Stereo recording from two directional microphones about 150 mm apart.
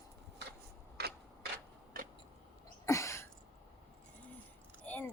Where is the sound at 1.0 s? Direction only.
90° right.